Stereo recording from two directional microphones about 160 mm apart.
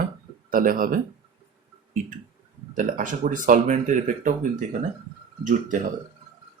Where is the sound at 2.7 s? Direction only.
55° right (ahead or behind).